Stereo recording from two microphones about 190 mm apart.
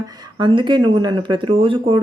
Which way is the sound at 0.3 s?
25° right (ahead or behind).